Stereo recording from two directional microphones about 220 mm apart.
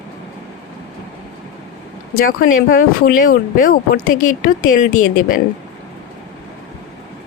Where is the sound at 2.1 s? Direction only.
40° left (ahead or behind).